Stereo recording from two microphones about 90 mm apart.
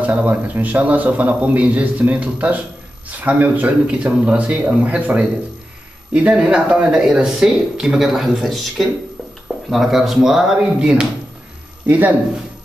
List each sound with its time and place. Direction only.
0.0 s a man's voice: 15° right (ahead or behind)